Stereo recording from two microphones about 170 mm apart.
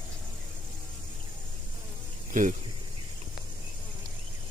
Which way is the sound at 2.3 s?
50° right (ahead or behind).